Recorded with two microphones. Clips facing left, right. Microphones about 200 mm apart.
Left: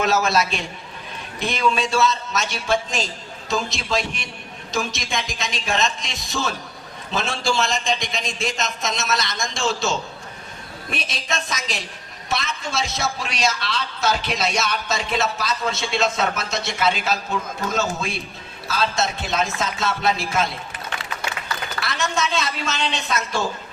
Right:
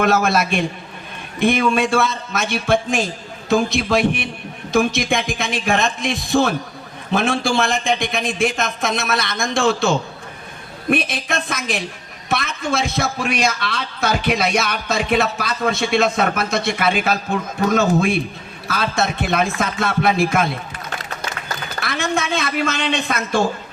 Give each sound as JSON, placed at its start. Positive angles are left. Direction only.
{"t": 0.0, "sound": "a man's voice", "side_deg": -55}
{"t": 21.8, "sound": "a woman's voice", "side_deg": -55}